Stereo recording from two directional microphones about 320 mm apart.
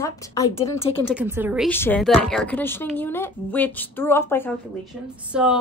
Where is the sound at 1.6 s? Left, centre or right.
Centre.